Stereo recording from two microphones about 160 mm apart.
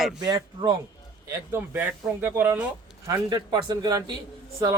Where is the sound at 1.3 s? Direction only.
15° right (ahead or behind).